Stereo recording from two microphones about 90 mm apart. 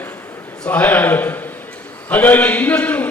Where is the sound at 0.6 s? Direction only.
20° left (ahead or behind).